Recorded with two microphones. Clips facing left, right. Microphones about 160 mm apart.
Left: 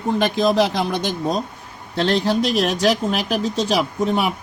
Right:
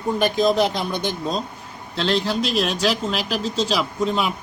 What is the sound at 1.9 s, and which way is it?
Speech, 60° left (ahead or behind).